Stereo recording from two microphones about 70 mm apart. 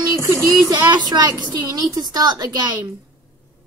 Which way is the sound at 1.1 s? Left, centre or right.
Right.